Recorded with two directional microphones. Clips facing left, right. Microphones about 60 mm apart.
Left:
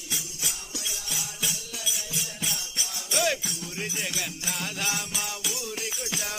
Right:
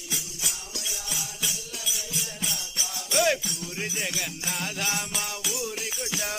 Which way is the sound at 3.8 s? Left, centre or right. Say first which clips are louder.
Right 1 dB; centre.